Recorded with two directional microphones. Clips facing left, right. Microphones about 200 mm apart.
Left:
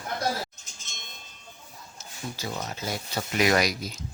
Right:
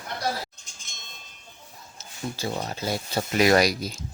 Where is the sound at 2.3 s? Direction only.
30° right (ahead or behind).